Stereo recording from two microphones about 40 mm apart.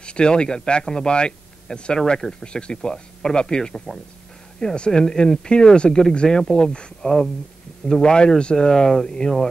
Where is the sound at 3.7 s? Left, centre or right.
Centre.